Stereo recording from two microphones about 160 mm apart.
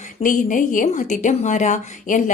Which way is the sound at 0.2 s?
55° left (ahead or behind).